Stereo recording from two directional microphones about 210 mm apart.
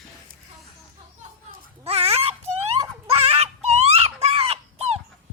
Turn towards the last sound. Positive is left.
turn(degrees=-30)  # may be behind; listen again after turning